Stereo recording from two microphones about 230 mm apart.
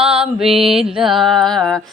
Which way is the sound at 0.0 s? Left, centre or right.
Centre.